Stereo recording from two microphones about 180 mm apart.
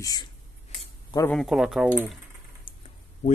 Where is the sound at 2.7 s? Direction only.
25° left (ahead or behind).